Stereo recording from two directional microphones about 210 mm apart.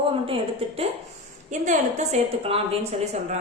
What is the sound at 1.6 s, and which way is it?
A woman's voice, 35° right (ahead or behind).